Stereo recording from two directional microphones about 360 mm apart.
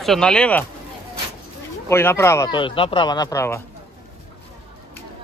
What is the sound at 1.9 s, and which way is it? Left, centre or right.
Speech, centre.